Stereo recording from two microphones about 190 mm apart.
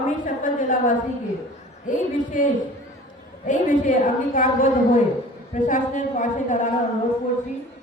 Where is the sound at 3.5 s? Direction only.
40° left (ahead or behind).